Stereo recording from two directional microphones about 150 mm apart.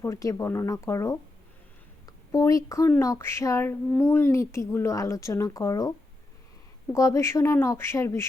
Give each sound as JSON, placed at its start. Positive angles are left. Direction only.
{"t": 0.0, "sound": "speech", "side_deg": 20}
{"t": 2.3, "sound": "speech", "side_deg": 20}
{"t": 6.9, "sound": "speech", "side_deg": 20}